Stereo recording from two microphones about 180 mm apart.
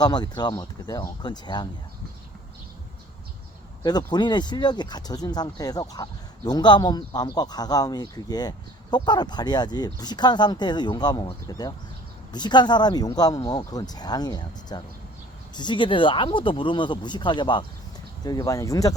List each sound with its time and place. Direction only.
0.0 s speech: 25° left (ahead or behind)
3.8 s speech: 25° left (ahead or behind)